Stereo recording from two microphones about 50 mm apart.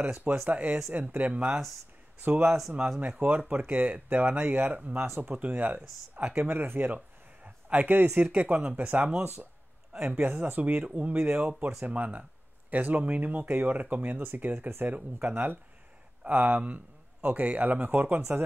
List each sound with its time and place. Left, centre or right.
0.0 s speech: right
3.3 s speech: right
4.9 s speech: right
5.3 s speech: right
6.5 s speech: right
7.4 s a sound: right
8.2 s speech: right
15.2 s a man's voice: right